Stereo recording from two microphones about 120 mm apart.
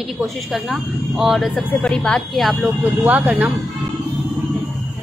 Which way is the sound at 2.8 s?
15° right (ahead or behind).